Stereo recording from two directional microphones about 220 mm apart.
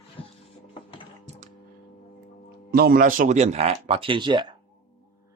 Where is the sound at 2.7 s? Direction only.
45° right (ahead or behind); by 4.5 s 20° right (ahead or behind).